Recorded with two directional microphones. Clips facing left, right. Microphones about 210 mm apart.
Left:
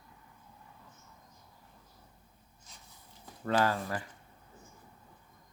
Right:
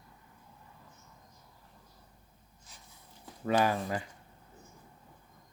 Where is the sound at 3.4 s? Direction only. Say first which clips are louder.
Right 1 dB; 15° right (ahead or behind).